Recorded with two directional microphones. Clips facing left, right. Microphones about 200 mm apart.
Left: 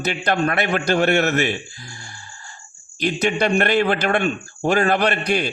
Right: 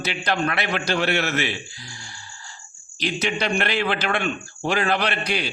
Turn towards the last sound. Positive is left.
turn(degrees=50)  # may be behind; listen again after turning